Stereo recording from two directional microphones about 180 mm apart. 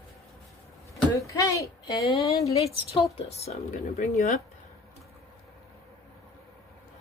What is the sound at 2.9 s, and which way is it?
Speech, 30° left (ahead or behind).